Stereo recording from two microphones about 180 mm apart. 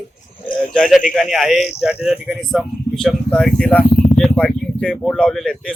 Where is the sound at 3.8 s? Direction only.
45° left (ahead or behind).